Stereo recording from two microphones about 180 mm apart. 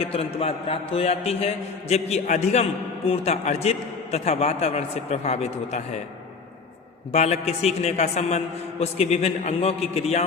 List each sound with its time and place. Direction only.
0.0 s a man's voice: 30° left (ahead or behind)
7.1 s a man's voice: 35° left (ahead or behind)